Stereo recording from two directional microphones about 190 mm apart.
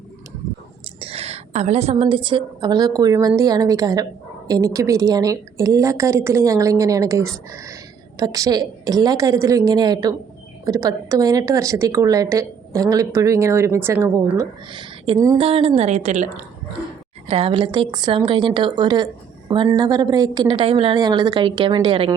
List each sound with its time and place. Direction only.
0.9 s a woman's voice: 30° right (ahead or behind); by 14.4 s 15° right (ahead or behind)
14.7 s a woman's voice: 25° right (ahead or behind)